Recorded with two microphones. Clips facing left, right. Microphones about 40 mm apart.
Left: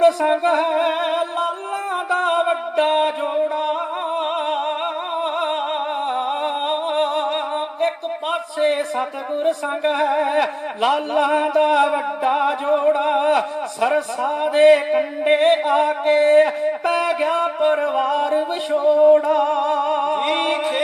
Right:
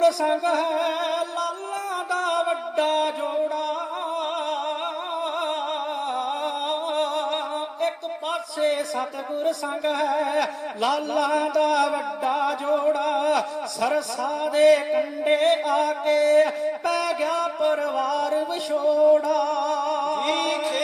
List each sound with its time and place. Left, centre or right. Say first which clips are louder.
0.0 s music: left 5 dB; left
2.0 s mantra: left 5 dB; left
5.2 s music: left 5 dB; left
6.1 s humming: left 5 dB; left
7.8 s speech: left 4 dB; left